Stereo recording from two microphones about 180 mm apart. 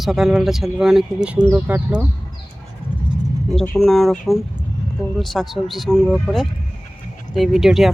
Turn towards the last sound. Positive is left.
turn(degrees=0)  # may be behind; listen again after turning